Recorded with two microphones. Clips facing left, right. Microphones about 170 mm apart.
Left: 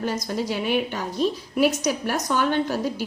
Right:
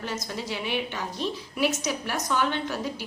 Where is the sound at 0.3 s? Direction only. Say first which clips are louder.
Left 7 dB; 40° left (ahead or behind).